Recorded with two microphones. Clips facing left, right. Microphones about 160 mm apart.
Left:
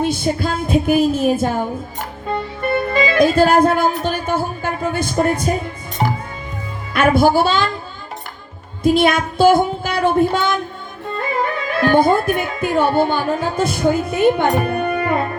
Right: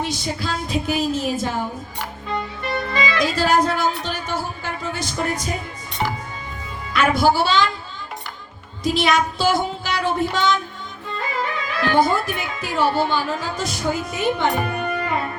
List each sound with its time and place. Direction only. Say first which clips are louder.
0.0 s speech: left 7 dB; 55° left (ahead or behind)
6.0 s music: left 4 dB; 40° left (ahead or behind)
6.9 s child singing: left 4 dB; 55° left (ahead or behind)
8.8 s child singing: left 5 dB; 55° left (ahead or behind)
11.2 s speech: left 5 dB; 50° left (ahead or behind)